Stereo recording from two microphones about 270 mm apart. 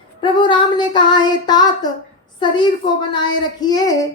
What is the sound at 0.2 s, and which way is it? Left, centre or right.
A child's voice, centre.